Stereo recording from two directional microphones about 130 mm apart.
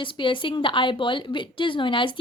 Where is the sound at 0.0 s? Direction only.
40° left (ahead or behind).